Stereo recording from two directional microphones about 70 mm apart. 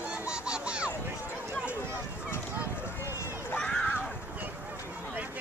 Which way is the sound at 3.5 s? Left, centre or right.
Centre.